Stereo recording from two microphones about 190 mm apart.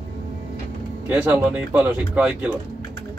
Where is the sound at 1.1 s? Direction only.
10° right (ahead or behind).